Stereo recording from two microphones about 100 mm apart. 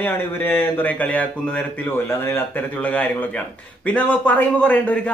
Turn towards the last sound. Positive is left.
turn(degrees=15)  # may be behind; listen again after turning